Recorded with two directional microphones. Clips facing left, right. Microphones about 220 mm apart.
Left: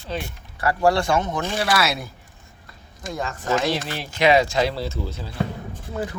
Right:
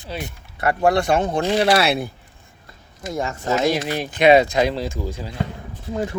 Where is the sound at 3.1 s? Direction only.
25° right (ahead or behind).